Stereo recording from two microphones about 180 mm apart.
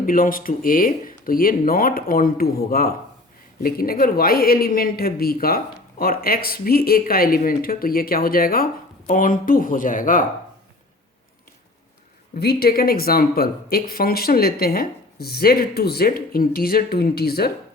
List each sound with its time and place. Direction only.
0.0 s speech: 50° left (ahead or behind)
12.4 s speech: 60° left (ahead or behind)